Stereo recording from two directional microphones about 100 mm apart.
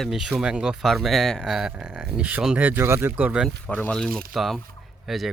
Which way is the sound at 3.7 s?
15° left (ahead or behind).